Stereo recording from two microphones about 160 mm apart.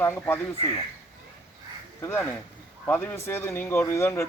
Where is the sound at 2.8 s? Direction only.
15° left (ahead or behind).